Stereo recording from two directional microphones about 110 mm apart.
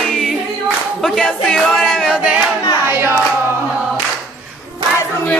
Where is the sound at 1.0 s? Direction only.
5° left (ahead or behind).